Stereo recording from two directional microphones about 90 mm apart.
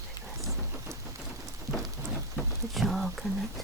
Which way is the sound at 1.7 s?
40° right (ahead or behind).